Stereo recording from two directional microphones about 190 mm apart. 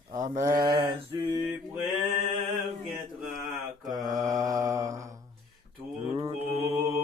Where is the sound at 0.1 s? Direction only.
40° right (ahead or behind).